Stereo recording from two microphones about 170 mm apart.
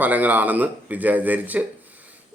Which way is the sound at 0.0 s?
10° right (ahead or behind).